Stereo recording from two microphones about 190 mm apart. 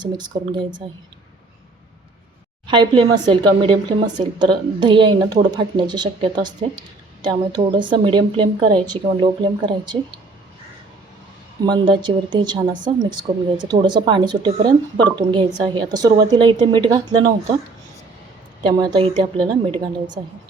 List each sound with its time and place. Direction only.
0.0 s speech: 25° right (ahead or behind)
2.6 s speech: 25° right (ahead or behind)
11.6 s speech: 25° right (ahead or behind)
18.6 s speech: 25° right (ahead or behind)